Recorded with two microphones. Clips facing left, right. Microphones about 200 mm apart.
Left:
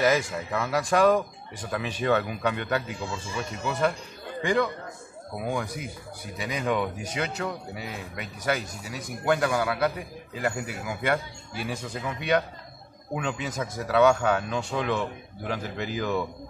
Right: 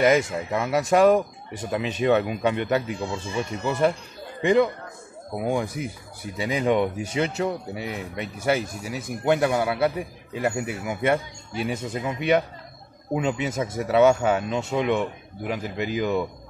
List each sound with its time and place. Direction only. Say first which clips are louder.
0.0 s speech: right 4 dB; 20° right (ahead or behind)